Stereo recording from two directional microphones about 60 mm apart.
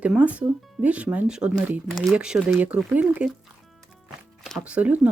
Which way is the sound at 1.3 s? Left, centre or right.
Centre.